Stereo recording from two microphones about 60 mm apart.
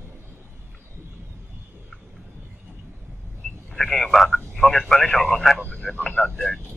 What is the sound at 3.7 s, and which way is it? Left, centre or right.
Speech, centre.